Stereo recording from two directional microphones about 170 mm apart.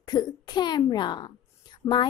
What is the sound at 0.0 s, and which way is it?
A woman's voice, 25° left (ahead or behind).